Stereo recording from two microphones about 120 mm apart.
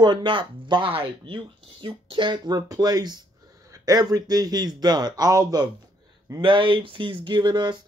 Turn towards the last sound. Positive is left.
turn(degrees=-40)  # may be behind; listen again after turning